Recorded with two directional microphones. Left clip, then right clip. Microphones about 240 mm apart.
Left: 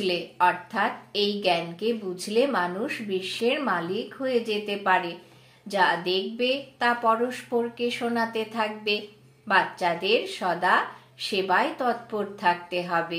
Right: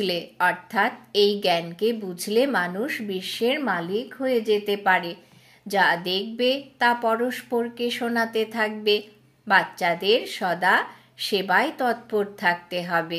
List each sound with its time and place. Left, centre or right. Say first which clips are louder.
0.0 s a woman's voice: even; right